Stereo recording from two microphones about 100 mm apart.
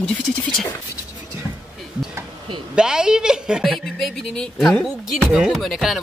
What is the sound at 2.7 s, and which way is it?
A man's voice, 5° right (ahead or behind).